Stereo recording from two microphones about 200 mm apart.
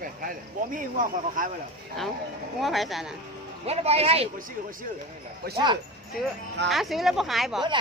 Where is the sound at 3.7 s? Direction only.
30° right (ahead or behind).